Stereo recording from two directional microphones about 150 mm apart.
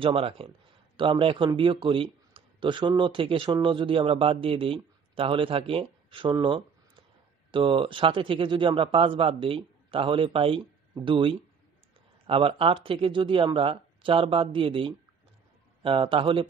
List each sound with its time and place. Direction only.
0.0 s speech: 35° right (ahead or behind)